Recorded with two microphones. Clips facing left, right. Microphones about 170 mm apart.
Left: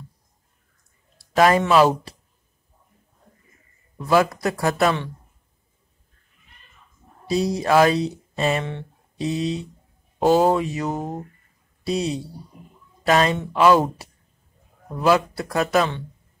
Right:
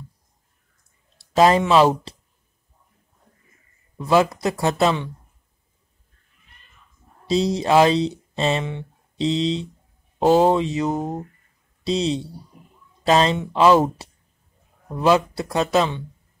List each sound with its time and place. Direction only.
1.1 s a sound: 25° right (ahead or behind)
4.0 s speech: 20° right (ahead or behind)
7.2 s speech: 25° right (ahead or behind)
10.9 s speech: centre (ahead or behind)
11.8 s speech: 25° right (ahead or behind)
15.0 s speech: 25° right (ahead or behind)